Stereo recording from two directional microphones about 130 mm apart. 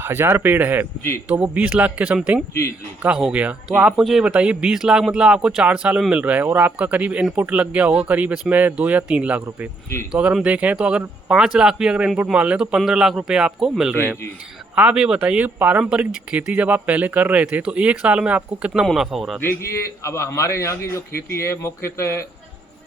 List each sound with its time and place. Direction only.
0.0 s a man's voice: 15° right (ahead or behind)
13.9 s a man's voice: 15° right (ahead or behind)
19.4 s a man's voice: 20° left (ahead or behind)